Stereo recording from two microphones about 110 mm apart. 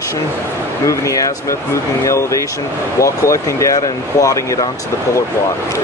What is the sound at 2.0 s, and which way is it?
Speech, 30° left (ahead or behind).